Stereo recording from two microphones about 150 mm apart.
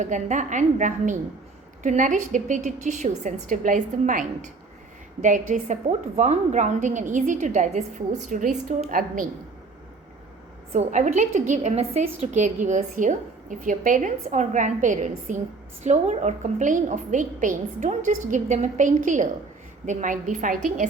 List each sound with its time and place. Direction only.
0.0 s a woman's voice: 55° right (ahead or behind)
10.7 s a woman's voice: 50° right (ahead or behind)